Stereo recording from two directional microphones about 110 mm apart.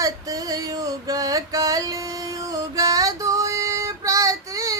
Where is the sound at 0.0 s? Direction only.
35° right (ahead or behind).